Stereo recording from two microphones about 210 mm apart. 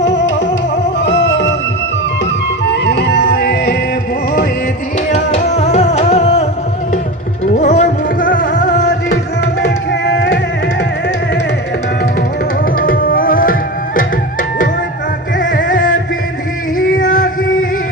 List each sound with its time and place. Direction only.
0.0 s music: 55° left (ahead or behind)
2.6 s music: 50° left (ahead or behind)
5.1 s music: 30° left (ahead or behind)
7.5 s music: 35° left (ahead or behind)
8.3 s music: 55° left (ahead or behind)
9.6 s music: 55° left (ahead or behind)
12.7 s tabla: 45° left (ahead or behind)
15.4 s music: 40° left (ahead or behind)